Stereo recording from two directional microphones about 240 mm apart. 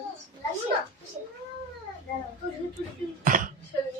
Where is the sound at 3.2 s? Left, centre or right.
Right.